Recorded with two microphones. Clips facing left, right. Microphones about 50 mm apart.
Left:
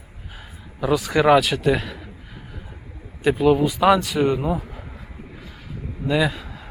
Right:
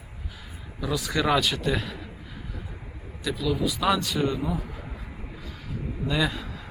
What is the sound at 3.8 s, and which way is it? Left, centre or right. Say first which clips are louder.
Speech: left 6 dB; centre.